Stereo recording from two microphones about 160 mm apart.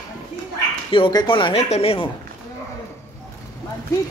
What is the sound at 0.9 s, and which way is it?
Speech, 30° left (ahead or behind).